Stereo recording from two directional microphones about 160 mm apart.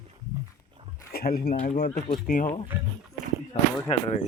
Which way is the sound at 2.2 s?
60° left (ahead or behind).